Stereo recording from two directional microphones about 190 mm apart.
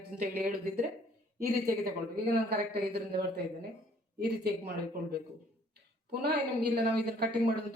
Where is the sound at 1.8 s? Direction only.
55° right (ahead or behind).